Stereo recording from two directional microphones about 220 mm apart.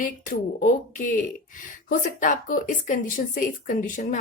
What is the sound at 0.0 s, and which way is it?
Speech, 35° left (ahead or behind).